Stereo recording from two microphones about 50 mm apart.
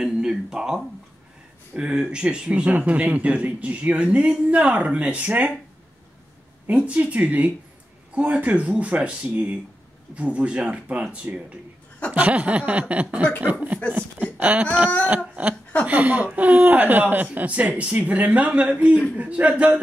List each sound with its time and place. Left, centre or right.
0.0 s speech: centre; by 5.5 s right
6.7 s speech: right
15.0 s a sound: right
15.8 s speech: right